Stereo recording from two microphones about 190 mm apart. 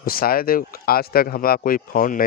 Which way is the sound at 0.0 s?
50° left (ahead or behind).